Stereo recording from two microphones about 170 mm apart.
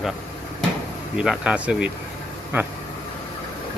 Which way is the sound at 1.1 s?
5° right (ahead or behind).